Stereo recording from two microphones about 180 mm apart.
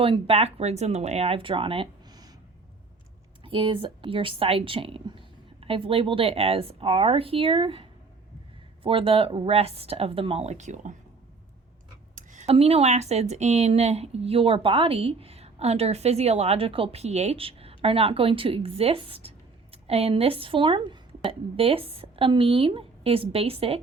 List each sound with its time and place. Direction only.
0.0 s speech: 30° right (ahead or behind)
3.4 s speech: 25° right (ahead or behind)
12.1 s speech: 40° right (ahead or behind)